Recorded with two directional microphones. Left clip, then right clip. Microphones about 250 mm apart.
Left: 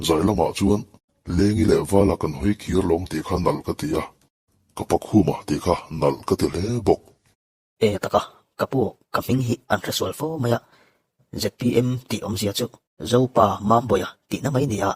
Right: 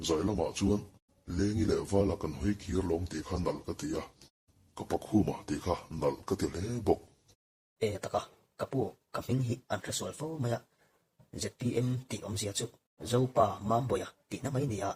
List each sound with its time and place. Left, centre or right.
0.0 s speech: left